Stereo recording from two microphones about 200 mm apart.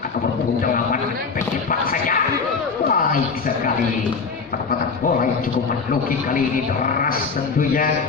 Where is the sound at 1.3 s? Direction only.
45° left (ahead or behind).